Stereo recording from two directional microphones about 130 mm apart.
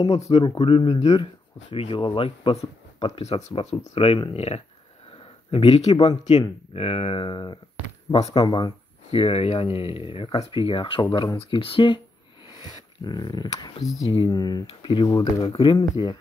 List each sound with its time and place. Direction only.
0.1 s speech: 50° left (ahead or behind)
8.1 s speech: 50° left (ahead or behind)
8.4 s speech: 30° left (ahead or behind)
11.5 s speech: 40° left (ahead or behind)